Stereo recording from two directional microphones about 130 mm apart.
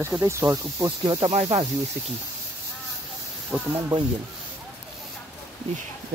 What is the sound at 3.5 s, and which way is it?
Speech, 20° right (ahead or behind).